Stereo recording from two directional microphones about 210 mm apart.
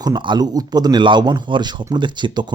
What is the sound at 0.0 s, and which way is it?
Speech, 20° right (ahead or behind).